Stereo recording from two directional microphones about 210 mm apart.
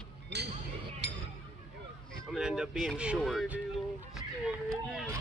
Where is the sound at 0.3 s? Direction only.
55° right (ahead or behind).